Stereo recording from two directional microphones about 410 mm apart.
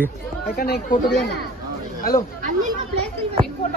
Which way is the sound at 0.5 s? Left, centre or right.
Left.